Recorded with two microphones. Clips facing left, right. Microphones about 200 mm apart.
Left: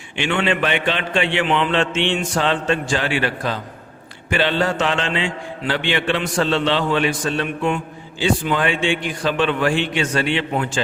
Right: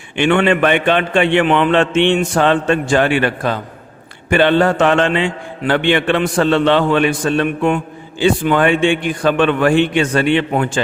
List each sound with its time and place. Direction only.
0.2 s a man's voice: 55° right (ahead or behind)